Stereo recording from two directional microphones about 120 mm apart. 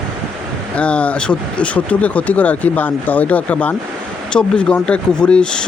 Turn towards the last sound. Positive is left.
turn(degrees=5)  # may be behind; listen again after turning